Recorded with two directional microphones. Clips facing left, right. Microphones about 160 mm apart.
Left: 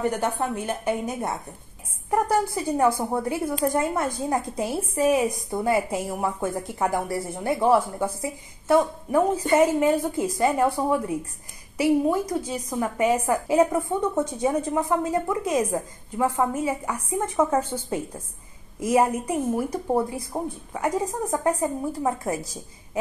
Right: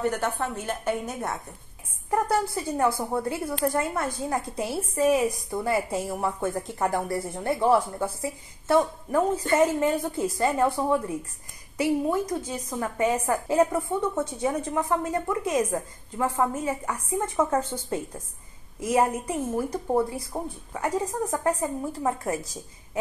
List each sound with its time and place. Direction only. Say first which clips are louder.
0.4 s a woman's voice: left 3 dB; 15° left (ahead or behind)